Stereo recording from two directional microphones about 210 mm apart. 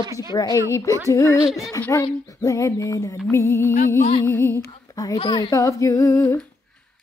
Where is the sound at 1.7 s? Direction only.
15° left (ahead or behind).